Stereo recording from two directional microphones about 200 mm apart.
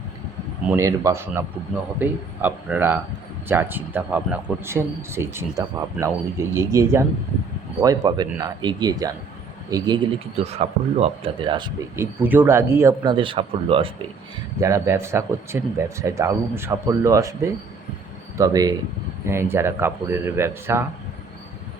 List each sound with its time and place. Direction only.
0.6 s speech: 10° right (ahead or behind)
10.3 s speech: 30° right (ahead or behind)
12.2 s speech: 10° right (ahead or behind); by 13.9 s 25° right (ahead or behind)
14.6 s speech: 15° right (ahead or behind)